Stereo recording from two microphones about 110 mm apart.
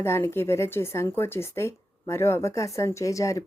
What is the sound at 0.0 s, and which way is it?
Speech, 20° left (ahead or behind).